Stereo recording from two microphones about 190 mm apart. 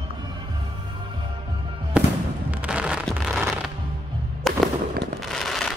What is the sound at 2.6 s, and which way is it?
Fireworks, 5° right (ahead or behind).